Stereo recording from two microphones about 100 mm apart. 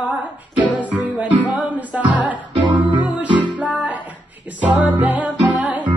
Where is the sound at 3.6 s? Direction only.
15° right (ahead or behind).